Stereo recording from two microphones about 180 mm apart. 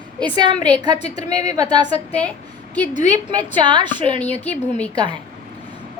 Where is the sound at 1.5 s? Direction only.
25° right (ahead or behind).